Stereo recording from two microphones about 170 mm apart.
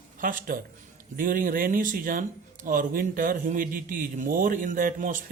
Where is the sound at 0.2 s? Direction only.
55° right (ahead or behind).